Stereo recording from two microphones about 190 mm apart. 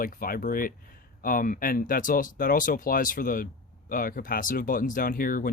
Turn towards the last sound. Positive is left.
turn(degrees=50)  # may be behind; listen again after turning